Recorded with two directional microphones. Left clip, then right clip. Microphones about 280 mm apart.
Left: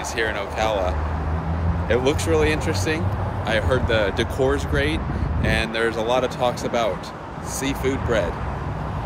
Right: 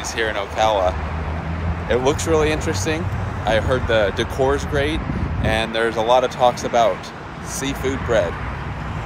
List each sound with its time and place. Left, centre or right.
0.2 s speech: centre